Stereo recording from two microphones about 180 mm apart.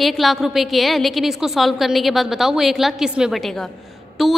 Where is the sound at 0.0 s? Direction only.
Centre (ahead or behind).